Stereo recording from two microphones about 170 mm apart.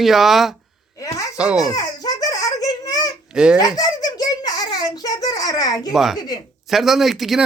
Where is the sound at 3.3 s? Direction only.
5° right (ahead or behind).